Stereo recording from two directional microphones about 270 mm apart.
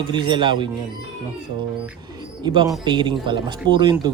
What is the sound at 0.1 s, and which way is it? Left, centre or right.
Speech, centre.